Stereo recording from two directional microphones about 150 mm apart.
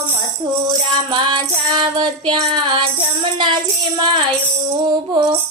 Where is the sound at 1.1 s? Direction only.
30° right (ahead or behind).